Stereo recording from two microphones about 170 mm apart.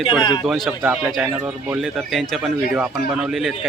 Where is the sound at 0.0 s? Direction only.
25° left (ahead or behind).